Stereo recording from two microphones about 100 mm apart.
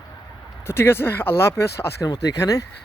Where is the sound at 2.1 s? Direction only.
40° left (ahead or behind).